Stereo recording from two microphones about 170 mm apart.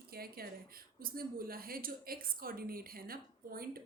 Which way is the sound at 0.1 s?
60° right (ahead or behind).